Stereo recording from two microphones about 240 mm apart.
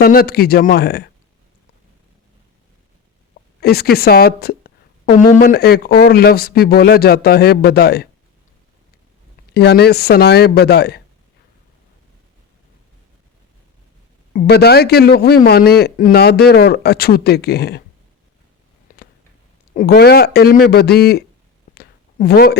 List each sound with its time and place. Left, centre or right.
0.0 s a man's voice: left
3.6 s a man's voice: left
9.6 s speech: left
14.3 s a man's voice: left
18.9 s a sound: left
19.7 s a man's voice: left
21.8 s a sound: left